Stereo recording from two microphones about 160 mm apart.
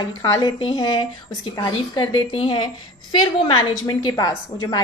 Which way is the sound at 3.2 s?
25° left (ahead or behind).